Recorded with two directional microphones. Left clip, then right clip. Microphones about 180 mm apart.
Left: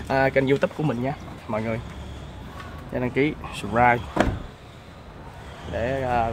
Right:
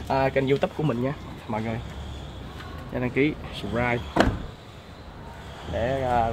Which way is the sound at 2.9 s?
10° left (ahead or behind).